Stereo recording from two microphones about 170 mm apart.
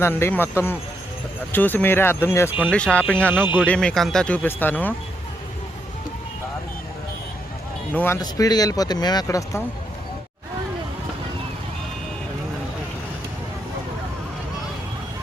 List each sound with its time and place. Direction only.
0.0 s speech: 15° left (ahead or behind)
3.4 s speech: 10° right (ahead or behind)
3.7 s speech: 5° left (ahead or behind)
7.9 s speech: 15° left (ahead or behind)